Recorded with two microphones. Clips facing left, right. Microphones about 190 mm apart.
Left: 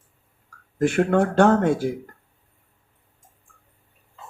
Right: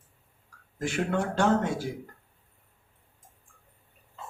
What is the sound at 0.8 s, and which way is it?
A man's voice, 60° left (ahead or behind).